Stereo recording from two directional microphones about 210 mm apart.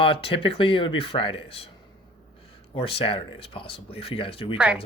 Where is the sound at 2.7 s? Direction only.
25° left (ahead or behind).